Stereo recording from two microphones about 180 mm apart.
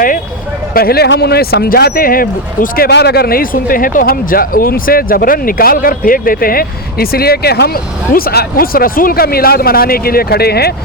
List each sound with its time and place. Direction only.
0.7 s speech: 55° left (ahead or behind)